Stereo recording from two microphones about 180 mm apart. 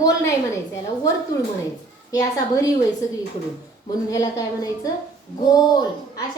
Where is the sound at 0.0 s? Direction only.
20° left (ahead or behind).